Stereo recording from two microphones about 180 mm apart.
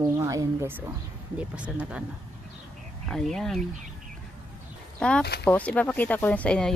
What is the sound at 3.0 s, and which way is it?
Speech, centre (ahead or behind).